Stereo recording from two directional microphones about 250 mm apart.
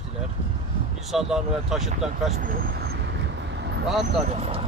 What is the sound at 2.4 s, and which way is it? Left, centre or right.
Speech, right.